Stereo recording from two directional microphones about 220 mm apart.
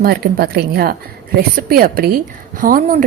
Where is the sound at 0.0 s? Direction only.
45° right (ahead or behind).